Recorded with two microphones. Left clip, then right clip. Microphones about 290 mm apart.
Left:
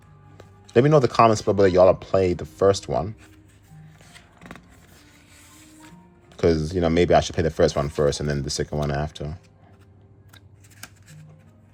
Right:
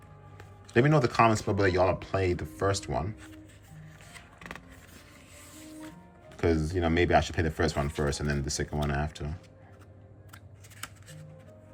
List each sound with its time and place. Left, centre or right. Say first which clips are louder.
0.3 s speech: left 7 dB; centre
6.3 s speech: left 7 dB; centre